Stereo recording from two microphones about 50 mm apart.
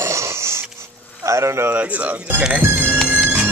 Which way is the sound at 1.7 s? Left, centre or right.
Right.